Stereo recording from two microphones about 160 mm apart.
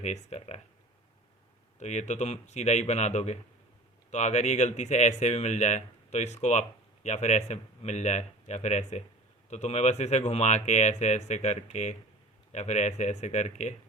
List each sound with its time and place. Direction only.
0.0 s speech: 45° left (ahead or behind)
1.8 s speech: 45° left (ahead or behind)